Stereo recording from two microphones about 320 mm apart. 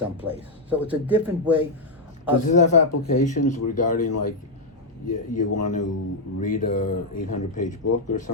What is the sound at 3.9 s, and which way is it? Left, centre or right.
Speech, left.